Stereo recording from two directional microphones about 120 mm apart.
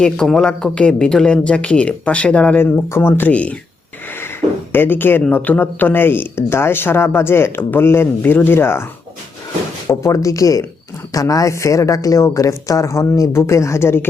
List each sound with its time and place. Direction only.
0.0 s speech: 5° left (ahead or behind)
4.7 s speech: 15° left (ahead or behind)